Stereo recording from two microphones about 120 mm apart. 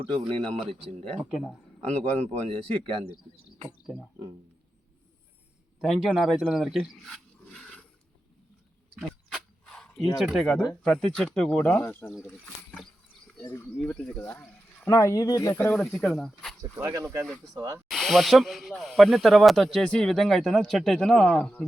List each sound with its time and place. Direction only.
1.3 s speech: centre (ahead or behind)
2.0 s speech: 65° right (ahead or behind)
5.8 s speech: centre (ahead or behind)
9.0 s a sound: 5° left (ahead or behind)
10.2 s speech: centre (ahead or behind)
13.7 s speech: 10° left (ahead or behind)
14.8 s speech: 25° left (ahead or behind)
15.6 s speech: 10° left (ahead or behind)
16.7 s speech: 25° right (ahead or behind)
17.8 s speech: centre (ahead or behind)